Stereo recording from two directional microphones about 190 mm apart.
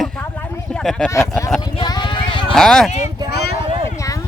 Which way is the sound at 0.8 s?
5° left (ahead or behind).